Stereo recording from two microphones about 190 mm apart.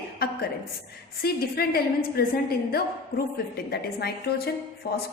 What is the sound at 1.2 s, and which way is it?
A woman's voice, 55° left (ahead or behind).